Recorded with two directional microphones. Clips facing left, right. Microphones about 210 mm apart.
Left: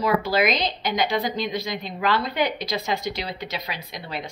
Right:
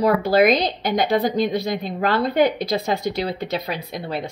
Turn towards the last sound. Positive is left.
turn(degrees=-55)  # may be behind; listen again after turning